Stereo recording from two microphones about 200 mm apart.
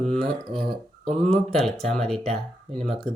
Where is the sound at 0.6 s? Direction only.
30° right (ahead or behind).